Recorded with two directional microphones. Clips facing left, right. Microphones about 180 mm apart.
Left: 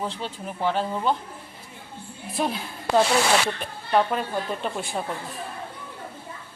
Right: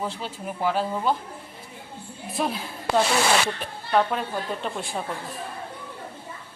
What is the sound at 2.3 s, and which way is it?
Speech, centre (ahead or behind).